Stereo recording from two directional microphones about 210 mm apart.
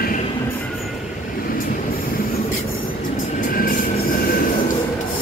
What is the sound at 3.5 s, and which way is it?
Train, 45° left (ahead or behind).